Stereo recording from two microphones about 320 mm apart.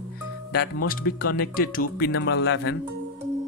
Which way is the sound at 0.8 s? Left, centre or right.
Left.